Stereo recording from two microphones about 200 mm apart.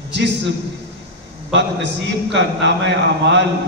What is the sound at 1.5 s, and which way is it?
A man's voice, 60° right (ahead or behind).